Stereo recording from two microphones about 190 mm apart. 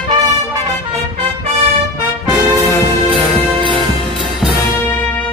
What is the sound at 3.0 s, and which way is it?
Music, 25° right (ahead or behind).